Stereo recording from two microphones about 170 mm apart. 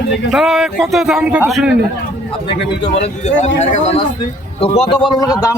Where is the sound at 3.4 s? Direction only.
45° left (ahead or behind).